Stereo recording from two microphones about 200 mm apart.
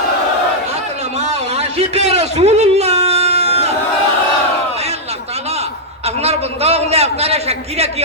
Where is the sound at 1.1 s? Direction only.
30° right (ahead or behind).